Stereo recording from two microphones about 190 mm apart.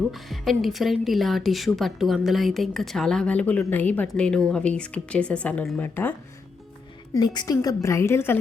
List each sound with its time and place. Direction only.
0.1 s a woman's voice: centre (ahead or behind)
7.1 s a woman's voice: 20° left (ahead or behind)